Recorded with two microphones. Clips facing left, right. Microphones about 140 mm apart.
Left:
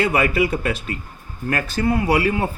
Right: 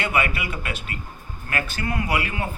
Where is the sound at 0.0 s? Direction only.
35° left (ahead or behind).